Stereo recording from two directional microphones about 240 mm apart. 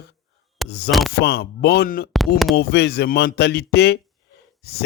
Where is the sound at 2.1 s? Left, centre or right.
Centre.